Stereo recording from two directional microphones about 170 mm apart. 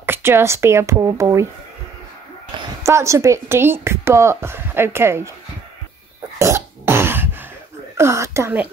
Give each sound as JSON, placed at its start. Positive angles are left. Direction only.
{"t": 0.0, "sound": "a woman's voice", "side_deg": -15}
{"t": 2.8, "sound": "a woman's voice", "side_deg": -15}
{"t": 6.3, "sound": "cough", "side_deg": -15}
{"t": 8.0, "sound": "speech", "side_deg": -15}